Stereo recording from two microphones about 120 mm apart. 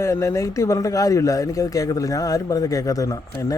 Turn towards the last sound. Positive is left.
turn(degrees=25)  # may be behind; listen again after turning